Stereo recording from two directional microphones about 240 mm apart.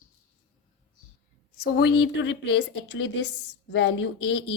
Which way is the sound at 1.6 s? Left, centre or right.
Left.